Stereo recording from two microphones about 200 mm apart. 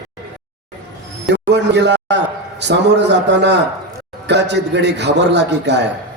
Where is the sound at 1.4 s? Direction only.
60° right (ahead or behind).